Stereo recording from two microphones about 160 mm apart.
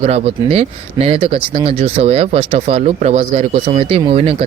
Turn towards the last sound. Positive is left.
turn(degrees=-40)  # may be behind; listen again after turning